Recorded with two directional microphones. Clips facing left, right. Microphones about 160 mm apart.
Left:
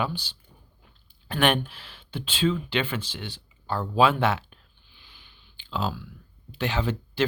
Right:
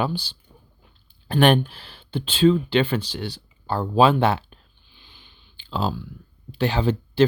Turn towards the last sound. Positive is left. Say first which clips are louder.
# right 5 dB
turn(degrees=-30)  # may be behind; listen again after turning